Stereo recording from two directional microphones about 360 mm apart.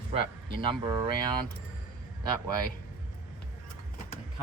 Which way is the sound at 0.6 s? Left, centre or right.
Centre.